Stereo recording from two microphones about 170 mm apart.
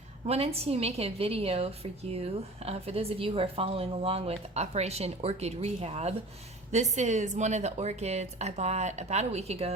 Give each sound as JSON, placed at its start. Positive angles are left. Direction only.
{"t": 0.3, "sound": "a woman's voice", "side_deg": -35}